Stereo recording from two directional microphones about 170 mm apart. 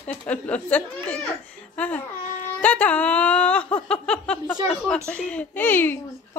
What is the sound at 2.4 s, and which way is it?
Speech, 10° left (ahead or behind).